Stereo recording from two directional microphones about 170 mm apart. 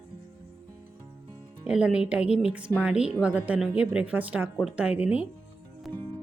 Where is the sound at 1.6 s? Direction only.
5° right (ahead or behind).